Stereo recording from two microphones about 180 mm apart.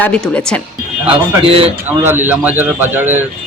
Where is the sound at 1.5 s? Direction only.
30° right (ahead or behind).